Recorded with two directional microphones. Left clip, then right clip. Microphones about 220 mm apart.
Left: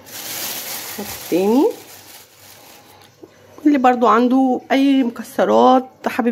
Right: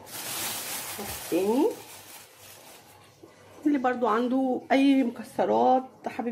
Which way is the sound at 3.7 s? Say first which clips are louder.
Left 12 dB; 40° left (ahead or behind).